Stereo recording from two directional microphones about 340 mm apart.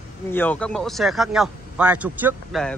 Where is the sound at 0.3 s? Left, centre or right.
Centre.